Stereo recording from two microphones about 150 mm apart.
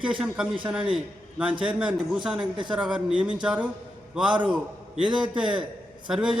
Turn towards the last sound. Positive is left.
turn(degrees=-5)  # may be behind; listen again after turning